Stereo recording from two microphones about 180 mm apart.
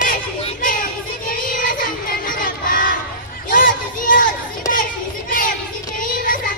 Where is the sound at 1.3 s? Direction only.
50° left (ahead or behind).